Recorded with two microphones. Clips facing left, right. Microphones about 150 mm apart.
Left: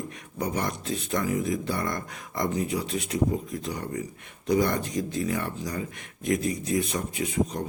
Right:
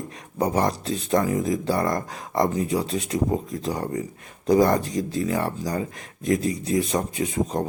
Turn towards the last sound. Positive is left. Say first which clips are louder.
# right 3 dB
turn(degrees=-40)  # may be behind; listen again after turning